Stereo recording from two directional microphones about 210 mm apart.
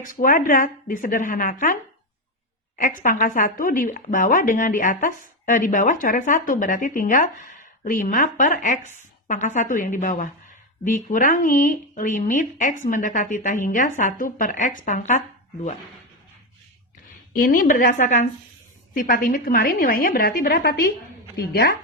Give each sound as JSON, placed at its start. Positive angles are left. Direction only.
{"t": 0.0, "sound": "speech", "side_deg": 40}
{"t": 17.3, "sound": "speech", "side_deg": 40}